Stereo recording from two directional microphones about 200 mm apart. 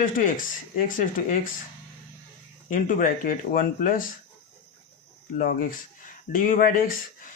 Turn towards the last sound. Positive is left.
turn(degrees=45)  # may be behind; listen again after turning